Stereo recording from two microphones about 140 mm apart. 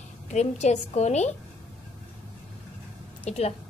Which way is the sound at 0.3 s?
55° left (ahead or behind).